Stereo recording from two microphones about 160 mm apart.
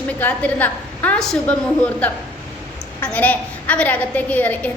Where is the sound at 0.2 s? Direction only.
10° left (ahead or behind).